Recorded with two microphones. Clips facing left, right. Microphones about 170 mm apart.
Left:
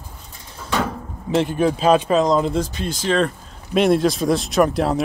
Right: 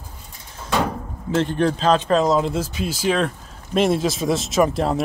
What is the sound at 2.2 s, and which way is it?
Speech, 5° right (ahead or behind).